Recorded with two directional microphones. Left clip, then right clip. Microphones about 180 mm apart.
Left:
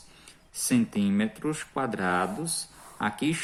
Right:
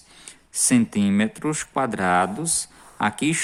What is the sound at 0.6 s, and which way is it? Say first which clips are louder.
Speech: right 6 dB; 45° right (ahead or behind).